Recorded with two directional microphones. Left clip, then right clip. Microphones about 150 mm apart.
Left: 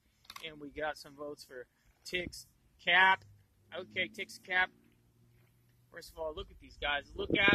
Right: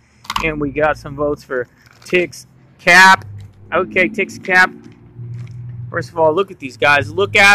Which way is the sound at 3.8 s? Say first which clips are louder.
Right 17 dB; 20° left (ahead or behind).